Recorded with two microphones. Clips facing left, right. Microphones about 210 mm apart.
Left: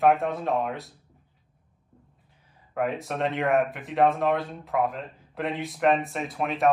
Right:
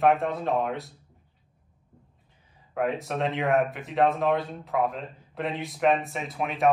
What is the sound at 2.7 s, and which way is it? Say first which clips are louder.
Speech: right 1 dB; centre (ahead or behind).